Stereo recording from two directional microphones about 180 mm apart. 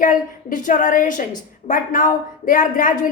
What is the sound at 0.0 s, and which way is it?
A woman's voice, 45° left (ahead or behind).